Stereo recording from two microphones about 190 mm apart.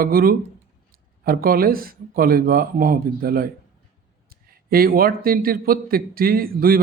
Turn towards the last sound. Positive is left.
turn(degrees=-50)  # may be behind; listen again after turning